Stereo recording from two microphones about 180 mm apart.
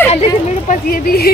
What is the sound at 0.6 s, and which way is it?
Speech, 55° left (ahead or behind).